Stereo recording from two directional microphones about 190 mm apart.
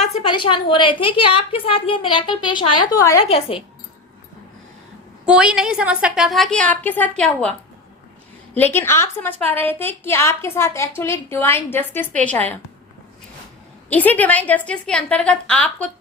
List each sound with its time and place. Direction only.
0.0 s a woman's voice: 35° left (ahead or behind); by 3.2 s 15° left (ahead or behind)
3.2 s a woman's voice: 30° left (ahead or behind)
5.2 s a woman's voice: 5° right (ahead or behind)
8.5 s a woman's voice: 10° left (ahead or behind)
13.9 s a woman's voice: 10° left (ahead or behind)